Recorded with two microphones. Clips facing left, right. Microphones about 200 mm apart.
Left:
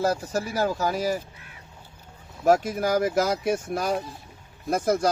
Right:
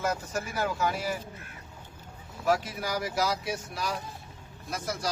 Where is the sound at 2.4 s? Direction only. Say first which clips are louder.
Left 7 dB; 45° left (ahead or behind).